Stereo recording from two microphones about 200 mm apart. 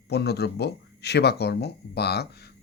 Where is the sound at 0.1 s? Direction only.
55° left (ahead or behind).